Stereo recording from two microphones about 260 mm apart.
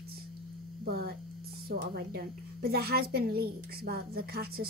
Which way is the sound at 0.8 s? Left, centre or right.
Right.